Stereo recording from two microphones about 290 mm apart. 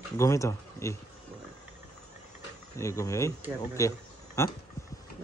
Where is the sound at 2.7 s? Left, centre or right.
Centre.